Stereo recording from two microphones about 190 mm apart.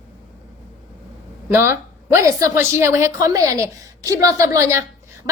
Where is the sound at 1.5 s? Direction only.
15° right (ahead or behind).